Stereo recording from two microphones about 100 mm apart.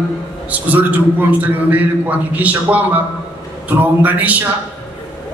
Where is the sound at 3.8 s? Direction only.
15° right (ahead or behind).